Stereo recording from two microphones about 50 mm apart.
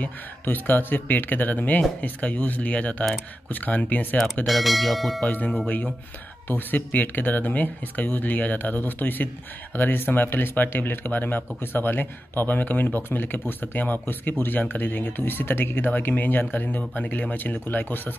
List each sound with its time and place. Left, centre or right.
0.0 s speech: left
4.5 s speech: centre
5.3 s speech: left